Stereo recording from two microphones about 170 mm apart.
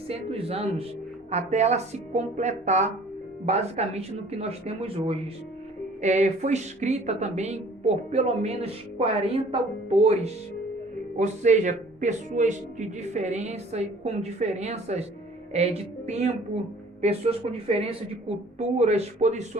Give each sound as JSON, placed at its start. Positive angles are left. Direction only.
{"t": 0.1, "sound": "speech", "side_deg": -35}